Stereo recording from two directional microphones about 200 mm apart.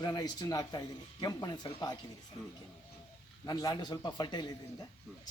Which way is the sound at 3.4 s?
20° left (ahead or behind).